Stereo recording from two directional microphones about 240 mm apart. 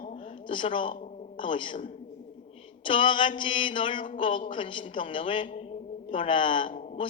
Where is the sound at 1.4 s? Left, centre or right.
Left.